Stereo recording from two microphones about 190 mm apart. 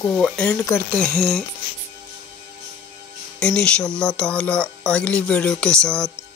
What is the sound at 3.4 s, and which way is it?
Speech, 5° left (ahead or behind).